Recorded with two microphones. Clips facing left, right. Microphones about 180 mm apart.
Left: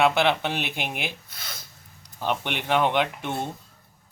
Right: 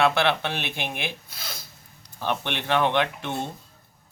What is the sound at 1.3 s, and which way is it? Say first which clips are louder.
Speech: right 2 dB; 30° right (ahead or behind).